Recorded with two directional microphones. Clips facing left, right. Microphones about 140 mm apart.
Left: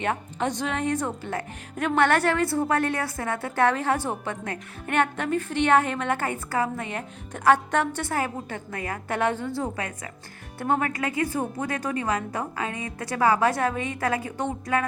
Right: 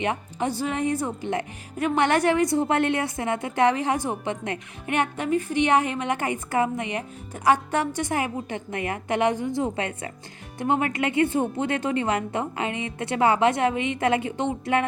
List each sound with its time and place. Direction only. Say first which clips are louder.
0.0 s a woman's voice: right 1 dB; 10° right (ahead or behind)